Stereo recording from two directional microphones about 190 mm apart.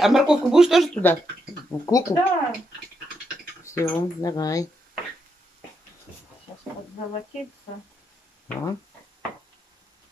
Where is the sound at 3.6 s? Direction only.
15° left (ahead or behind).